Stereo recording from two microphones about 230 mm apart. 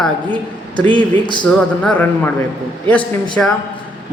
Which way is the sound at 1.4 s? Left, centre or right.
Centre.